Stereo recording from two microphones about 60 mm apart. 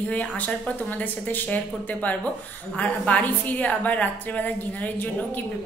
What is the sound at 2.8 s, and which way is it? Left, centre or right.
A woman's voice, left.